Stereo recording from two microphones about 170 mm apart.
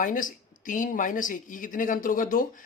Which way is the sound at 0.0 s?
50° left (ahead or behind).